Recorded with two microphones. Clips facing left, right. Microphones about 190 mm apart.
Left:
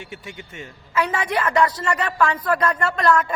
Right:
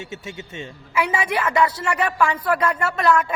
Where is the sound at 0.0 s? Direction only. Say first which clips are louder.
Right 3 dB; 25° right (ahead or behind).